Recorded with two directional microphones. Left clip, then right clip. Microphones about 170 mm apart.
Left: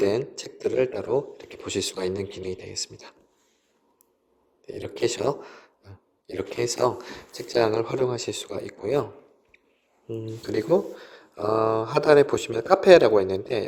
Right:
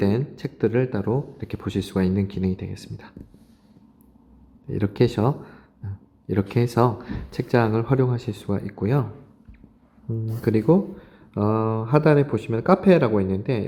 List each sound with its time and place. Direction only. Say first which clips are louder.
0.0 s speech: left 1 dB; 30° left (ahead or behind)
4.6 s a man's voice: right 4 dB; 30° left (ahead or behind)
10.1 s speech: right 6 dB; 40° left (ahead or behind)